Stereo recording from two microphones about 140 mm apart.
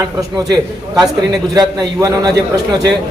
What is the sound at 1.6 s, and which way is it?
Speech, 25° right (ahead or behind).